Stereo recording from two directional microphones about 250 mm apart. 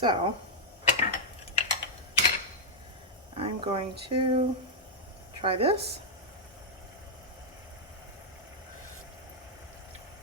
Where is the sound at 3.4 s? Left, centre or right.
Right.